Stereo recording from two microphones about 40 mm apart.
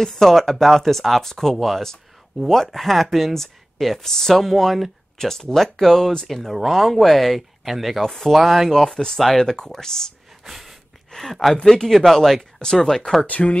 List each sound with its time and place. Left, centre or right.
0.0 s speech: centre
8.6 s speech: centre
10.4 s a sound: centre
11.1 s speech: centre
13.3 s speech: left